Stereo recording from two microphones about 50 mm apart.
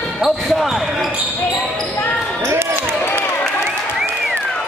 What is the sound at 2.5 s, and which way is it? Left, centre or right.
Basketball bounce, right.